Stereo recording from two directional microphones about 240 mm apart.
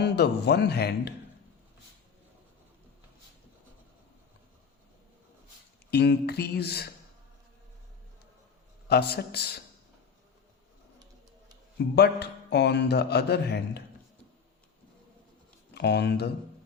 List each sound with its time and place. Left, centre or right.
0.0 s speech: left
5.9 s speech: left
8.9 s speech: left
11.8 s speech: left
15.7 s speech: left